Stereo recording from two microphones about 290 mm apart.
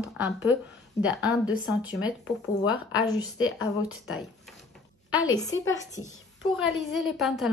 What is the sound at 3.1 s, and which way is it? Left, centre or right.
Speech, centre.